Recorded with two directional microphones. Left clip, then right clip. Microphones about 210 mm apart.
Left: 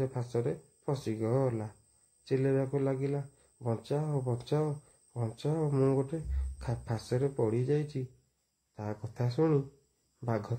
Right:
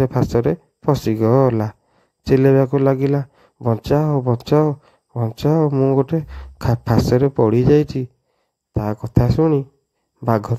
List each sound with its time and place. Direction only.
0.0 s speech: 45° right (ahead or behind)